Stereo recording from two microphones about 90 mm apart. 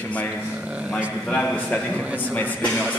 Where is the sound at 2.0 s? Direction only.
15° right (ahead or behind).